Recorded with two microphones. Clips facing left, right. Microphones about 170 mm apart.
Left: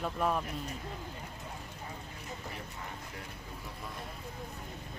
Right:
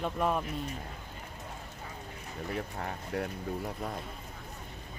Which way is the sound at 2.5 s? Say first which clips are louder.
Right 7 dB; 65° right (ahead or behind).